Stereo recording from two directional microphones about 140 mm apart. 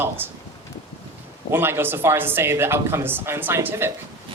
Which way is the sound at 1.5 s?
15° right (ahead or behind).